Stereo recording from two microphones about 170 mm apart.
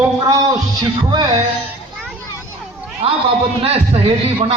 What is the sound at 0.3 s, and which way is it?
Music, 25° right (ahead or behind).